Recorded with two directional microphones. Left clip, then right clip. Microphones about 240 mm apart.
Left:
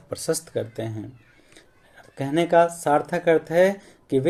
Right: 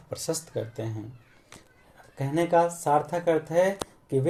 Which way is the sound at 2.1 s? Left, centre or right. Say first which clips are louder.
Left 5 dB; left.